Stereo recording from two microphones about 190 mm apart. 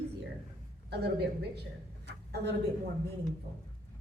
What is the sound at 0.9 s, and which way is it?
Speech, 60° right (ahead or behind).